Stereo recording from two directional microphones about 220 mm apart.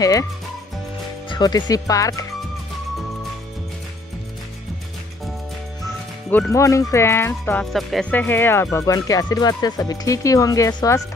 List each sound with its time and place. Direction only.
0.0 s speech: 15° left (ahead or behind)
1.3 s speech: 20° left (ahead or behind)
6.3 s speech: 10° left (ahead or behind)